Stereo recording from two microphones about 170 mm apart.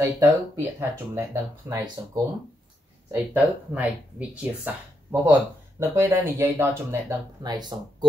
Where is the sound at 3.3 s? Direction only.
10° right (ahead or behind).